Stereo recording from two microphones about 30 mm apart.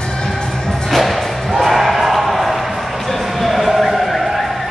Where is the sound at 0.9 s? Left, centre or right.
Centre.